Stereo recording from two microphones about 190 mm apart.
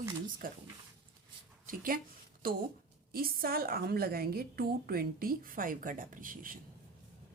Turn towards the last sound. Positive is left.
turn(degrees=-45)  # may be behind; listen again after turning